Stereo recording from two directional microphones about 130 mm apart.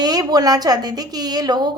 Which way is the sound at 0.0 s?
30° right (ahead or behind).